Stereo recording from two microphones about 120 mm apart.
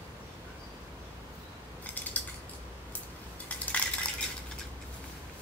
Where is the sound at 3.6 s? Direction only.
10° left (ahead or behind).